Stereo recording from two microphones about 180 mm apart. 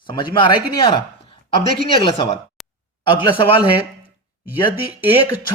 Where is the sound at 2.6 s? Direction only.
Centre (ahead or behind).